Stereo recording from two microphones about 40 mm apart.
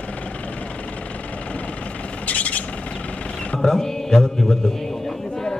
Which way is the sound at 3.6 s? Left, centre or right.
Centre.